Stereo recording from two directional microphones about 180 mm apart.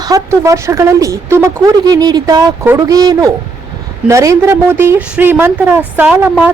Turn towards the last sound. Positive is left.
turn(degrees=-10)  # may be behind; listen again after turning